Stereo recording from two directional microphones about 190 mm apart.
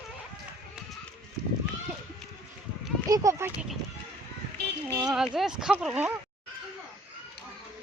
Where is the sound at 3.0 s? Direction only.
15° right (ahead or behind).